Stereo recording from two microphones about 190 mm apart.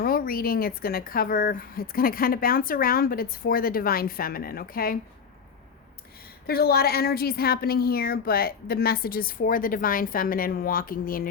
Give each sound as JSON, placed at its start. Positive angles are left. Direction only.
{"t": 0.0, "sound": "speech", "side_deg": 50}
{"t": 6.5, "sound": "speech", "side_deg": 55}